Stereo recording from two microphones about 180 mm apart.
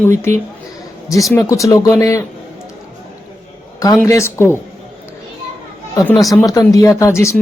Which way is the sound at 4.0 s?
15° left (ahead or behind).